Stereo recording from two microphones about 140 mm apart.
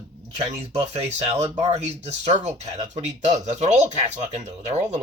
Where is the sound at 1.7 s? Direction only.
50° right (ahead or behind).